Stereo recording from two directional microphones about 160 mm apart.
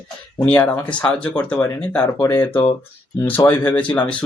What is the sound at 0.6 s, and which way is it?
Speech, 10° left (ahead or behind).